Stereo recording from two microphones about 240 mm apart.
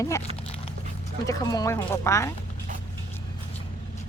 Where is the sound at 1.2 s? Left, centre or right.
Centre.